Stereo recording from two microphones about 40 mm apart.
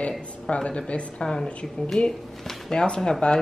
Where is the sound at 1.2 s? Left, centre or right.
Centre.